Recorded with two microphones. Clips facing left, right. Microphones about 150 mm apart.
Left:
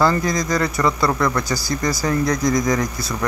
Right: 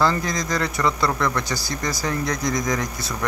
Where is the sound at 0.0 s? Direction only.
10° left (ahead or behind).